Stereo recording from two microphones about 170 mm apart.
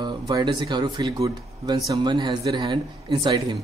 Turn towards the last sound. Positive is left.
turn(degrees=-25)  # may be behind; listen again after turning